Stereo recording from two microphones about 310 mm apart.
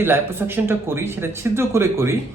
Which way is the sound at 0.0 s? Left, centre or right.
Centre.